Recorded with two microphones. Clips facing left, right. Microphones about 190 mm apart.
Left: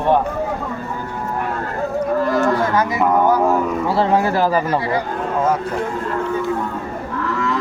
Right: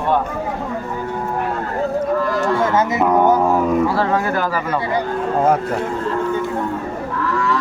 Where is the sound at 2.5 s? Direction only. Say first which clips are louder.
Right 1 dB; 25° right (ahead or behind).